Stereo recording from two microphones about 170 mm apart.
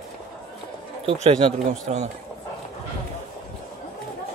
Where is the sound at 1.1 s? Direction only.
40° right (ahead or behind).